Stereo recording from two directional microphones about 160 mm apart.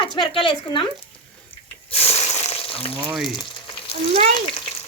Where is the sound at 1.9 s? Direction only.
40° left (ahead or behind).